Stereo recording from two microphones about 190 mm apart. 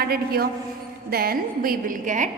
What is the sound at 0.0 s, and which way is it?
A woman's voice, 55° right (ahead or behind).